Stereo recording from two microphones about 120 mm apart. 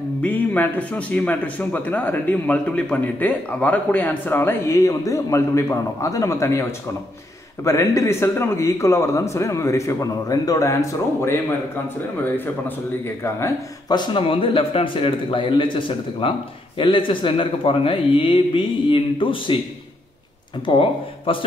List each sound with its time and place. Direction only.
0.2 s a man's voice: 10° left (ahead or behind)
7.6 s a man's voice: 25° left (ahead or behind)
12.6 s a man's voice: 20° left (ahead or behind)
13.8 s speech: 40° left (ahead or behind)
20.6 s speech: 45° left (ahead or behind)